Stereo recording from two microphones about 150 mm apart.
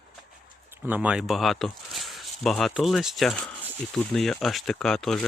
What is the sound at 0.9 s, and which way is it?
Speech, 10° right (ahead or behind).